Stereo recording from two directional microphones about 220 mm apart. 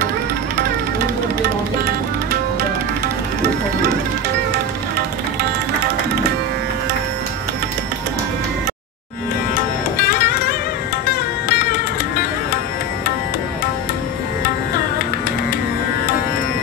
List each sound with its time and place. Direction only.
9.9 s music: 45° left (ahead or behind)